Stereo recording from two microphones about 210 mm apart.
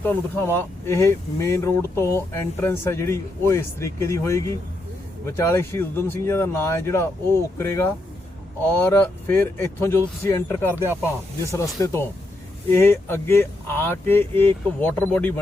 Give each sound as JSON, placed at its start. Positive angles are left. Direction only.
{"t": 0.0, "sound": "speech", "side_deg": 10}
{"t": 10.8, "sound": "speech", "side_deg": -10}
{"t": 11.4, "sound": "speech", "side_deg": 15}